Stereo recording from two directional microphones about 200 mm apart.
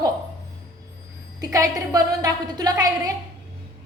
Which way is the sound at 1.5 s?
20° right (ahead or behind).